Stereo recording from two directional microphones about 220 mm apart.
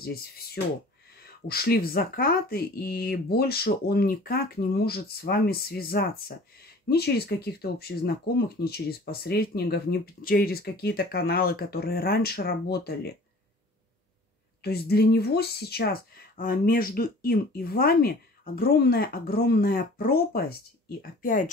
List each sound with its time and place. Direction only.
0.0 s speech: 45° left (ahead or behind)
14.6 s speech: 45° left (ahead or behind)